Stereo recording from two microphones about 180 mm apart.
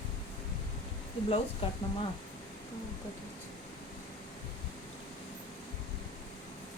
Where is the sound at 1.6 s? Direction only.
30° left (ahead or behind).